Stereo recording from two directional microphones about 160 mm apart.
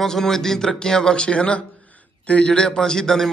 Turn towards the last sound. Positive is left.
turn(degrees=5)  # may be behind; listen again after turning